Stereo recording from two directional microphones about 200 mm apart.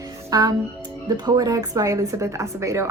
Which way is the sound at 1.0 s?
20° right (ahead or behind).